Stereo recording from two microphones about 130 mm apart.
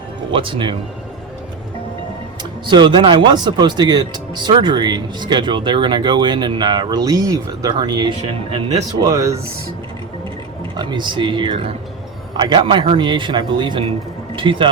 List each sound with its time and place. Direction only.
0.3 s speech: 40° right (ahead or behind)
2.4 s speech: 35° right (ahead or behind)
10.8 s speech: 35° right (ahead or behind)